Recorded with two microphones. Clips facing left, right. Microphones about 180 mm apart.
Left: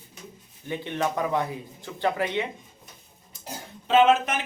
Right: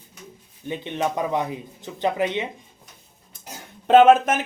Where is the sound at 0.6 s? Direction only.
20° right (ahead or behind).